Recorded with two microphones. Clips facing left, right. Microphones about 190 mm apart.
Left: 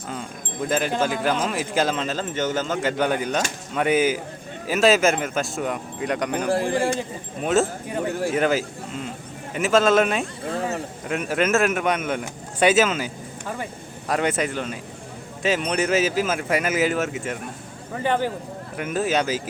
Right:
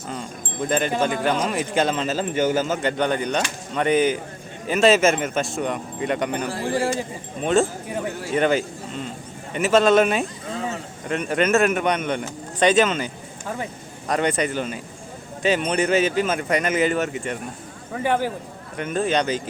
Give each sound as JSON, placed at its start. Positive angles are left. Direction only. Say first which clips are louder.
{"t": 0.7, "sound": "speech", "louder": "right 1 dB", "side_deg": 0}
{"t": 2.8, "sound": "speech", "louder": "even", "side_deg": 5}
{"t": 6.5, "sound": "speech", "louder": "left 3 dB", "side_deg": 55}
{"t": 7.4, "sound": "speech", "louder": "right 1 dB", "side_deg": 5}
{"t": 14.1, "sound": "speech", "louder": "right 1 dB", "side_deg": 5}
{"t": 18.0, "sound": "a man's voice", "louder": "right 1 dB", "side_deg": -10}
{"t": 18.8, "sound": "speech", "louder": "right 1 dB", "side_deg": 5}